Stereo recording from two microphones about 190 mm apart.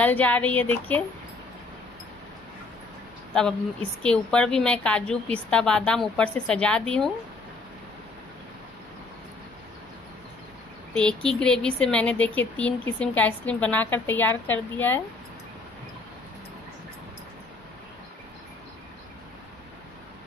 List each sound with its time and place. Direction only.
0.0 s speech: 10° left (ahead or behind)
4.0 s a woman's voice: 5° left (ahead or behind)
11.0 s speech: 5° left (ahead or behind)